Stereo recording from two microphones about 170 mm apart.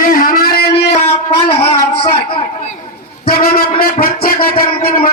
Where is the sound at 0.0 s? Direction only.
55° left (ahead or behind).